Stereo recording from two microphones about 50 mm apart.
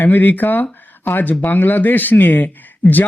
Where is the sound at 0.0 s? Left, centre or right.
Left.